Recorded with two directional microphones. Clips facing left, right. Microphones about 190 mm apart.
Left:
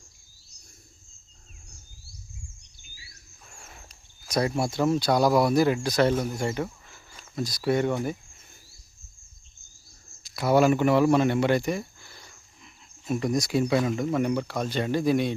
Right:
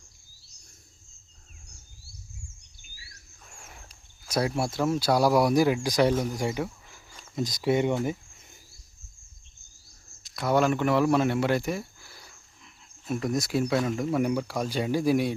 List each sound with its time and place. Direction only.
4.3 s speech: 5° right (ahead or behind)
10.2 s speech: 5° left (ahead or behind)